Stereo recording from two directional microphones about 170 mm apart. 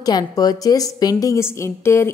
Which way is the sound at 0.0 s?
25° left (ahead or behind).